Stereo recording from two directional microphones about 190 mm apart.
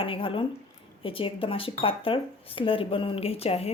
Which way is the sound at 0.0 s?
30° left (ahead or behind).